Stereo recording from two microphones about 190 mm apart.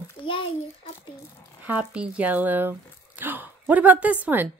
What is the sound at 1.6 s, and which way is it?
A woman's voice, 5° right (ahead or behind).